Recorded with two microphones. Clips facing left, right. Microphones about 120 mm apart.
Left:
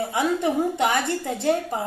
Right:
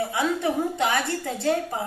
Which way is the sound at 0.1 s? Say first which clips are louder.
Left 2 dB; 20° left (ahead or behind).